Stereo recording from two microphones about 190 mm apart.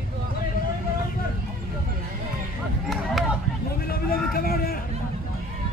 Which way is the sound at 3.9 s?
50° left (ahead or behind).